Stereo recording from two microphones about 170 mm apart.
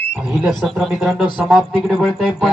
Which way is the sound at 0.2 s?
5° right (ahead or behind).